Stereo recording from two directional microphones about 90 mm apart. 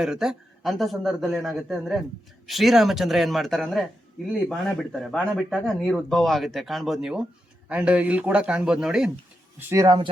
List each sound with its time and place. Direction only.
0.0 s a man's voice: 5° right (ahead or behind)
9.6 s speech: 25° right (ahead or behind)
9.8 s speech: 55° right (ahead or behind)